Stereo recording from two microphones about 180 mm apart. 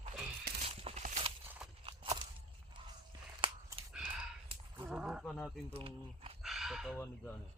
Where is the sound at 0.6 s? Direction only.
35° right (ahead or behind).